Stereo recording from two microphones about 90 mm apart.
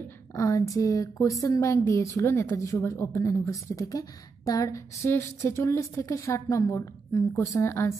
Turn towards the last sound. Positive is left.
turn(degrees=30)  # may be behind; listen again after turning